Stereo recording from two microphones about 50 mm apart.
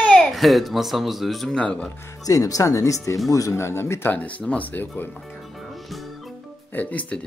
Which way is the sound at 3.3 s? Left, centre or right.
Left.